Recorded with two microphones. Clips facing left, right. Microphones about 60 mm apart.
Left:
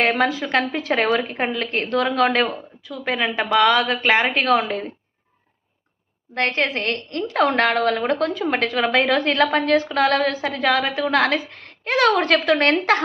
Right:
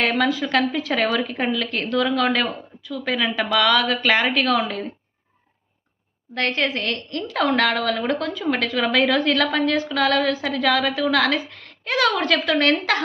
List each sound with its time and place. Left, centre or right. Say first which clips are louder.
0.0 s a woman's voice: left 1 dB; left
6.3 s a woman's voice: left 1 dB; left